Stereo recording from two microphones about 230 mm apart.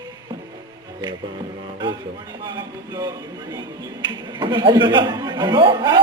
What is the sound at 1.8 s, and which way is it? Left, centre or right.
Speech, centre.